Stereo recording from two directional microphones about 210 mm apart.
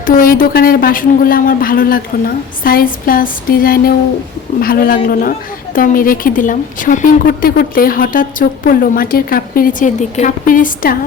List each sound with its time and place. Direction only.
0.0 s a woman's voice: 45° left (ahead or behind)